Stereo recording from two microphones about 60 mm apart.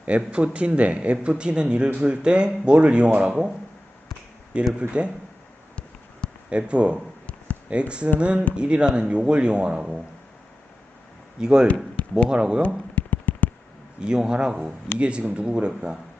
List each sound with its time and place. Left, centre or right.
0.0 s speech: centre
4.8 s speech: centre
6.5 s speech: centre
11.3 s speech: centre
12.0 s a sound: centre
12.3 s speech: centre
12.6 s a sound: left
14.0 s speech: centre